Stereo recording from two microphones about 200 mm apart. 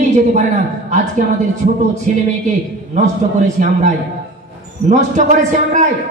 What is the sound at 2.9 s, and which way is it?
Speech, 35° right (ahead or behind).